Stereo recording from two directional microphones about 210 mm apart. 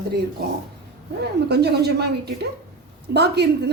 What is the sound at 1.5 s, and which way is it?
Speech, 50° right (ahead or behind).